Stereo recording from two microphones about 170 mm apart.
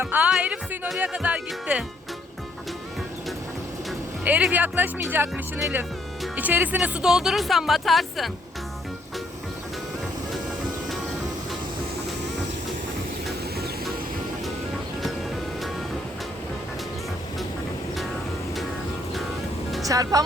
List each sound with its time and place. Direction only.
0.0 s speech: 10° right (ahead or behind)
4.2 s speech: 10° right (ahead or behind)
19.9 s speech: 20° right (ahead or behind)